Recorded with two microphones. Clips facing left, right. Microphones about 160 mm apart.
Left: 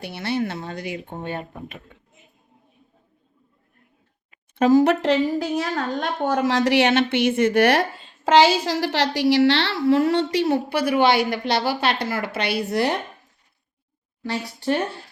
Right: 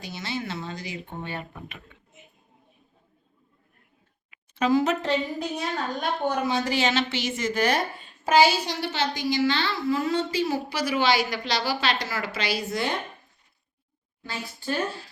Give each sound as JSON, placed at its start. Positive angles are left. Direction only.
{"t": 0.0, "sound": "a woman's voice", "side_deg": 60}
{"t": 4.3, "sound": "a sound", "side_deg": 45}
{"t": 4.9, "sound": "a woman's voice", "side_deg": 90}
{"t": 10.5, "sound": "a woman's voice", "side_deg": 60}
{"t": 14.3, "sound": "a woman's voice", "side_deg": 70}